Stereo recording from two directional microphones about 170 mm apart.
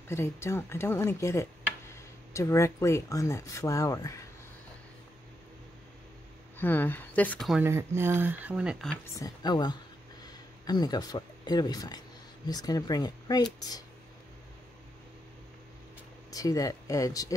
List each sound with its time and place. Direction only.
0.1 s speech: 15° left (ahead or behind)
6.6 s speech: 10° left (ahead or behind)
7.6 s speech: 15° right (ahead or behind)
9.1 s speech: 25° left (ahead or behind)
16.3 s speech: 20° left (ahead or behind)